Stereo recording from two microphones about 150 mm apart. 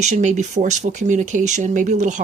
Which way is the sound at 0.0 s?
50° right (ahead or behind).